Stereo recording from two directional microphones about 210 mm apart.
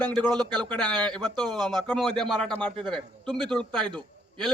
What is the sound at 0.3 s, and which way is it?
Speech, 20° right (ahead or behind).